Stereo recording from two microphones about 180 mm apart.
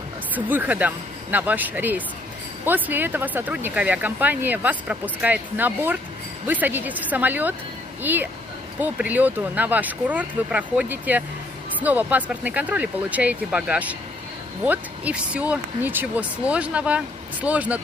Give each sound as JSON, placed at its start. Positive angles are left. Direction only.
{"t": 0.3, "sound": "speech", "side_deg": -10}